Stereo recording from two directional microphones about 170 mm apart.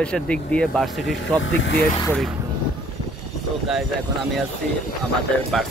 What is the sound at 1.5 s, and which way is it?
Speech, 90° left.